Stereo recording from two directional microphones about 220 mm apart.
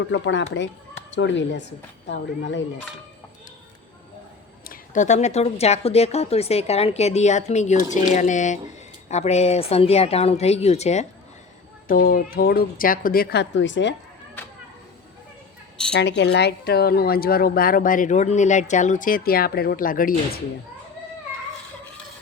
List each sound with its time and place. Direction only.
0.1 s speech: 55° left (ahead or behind)
4.7 s a woman's voice: 35° left (ahead or behind); by 13.9 s 55° left (ahead or behind)
15.9 s speech: 50° left (ahead or behind)